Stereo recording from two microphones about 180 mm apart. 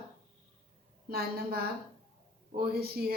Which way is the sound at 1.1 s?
60° right (ahead or behind).